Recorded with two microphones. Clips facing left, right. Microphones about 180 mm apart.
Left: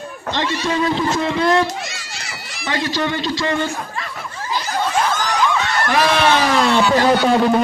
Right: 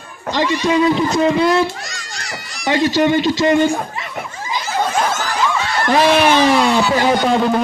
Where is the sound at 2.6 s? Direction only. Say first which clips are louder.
Right 7 dB; 15° right (ahead or behind).